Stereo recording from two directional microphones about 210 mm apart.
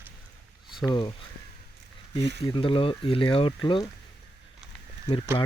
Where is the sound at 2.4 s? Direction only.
25° left (ahead or behind).